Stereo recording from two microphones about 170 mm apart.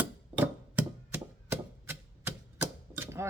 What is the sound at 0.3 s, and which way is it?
Chopping, 10° right (ahead or behind).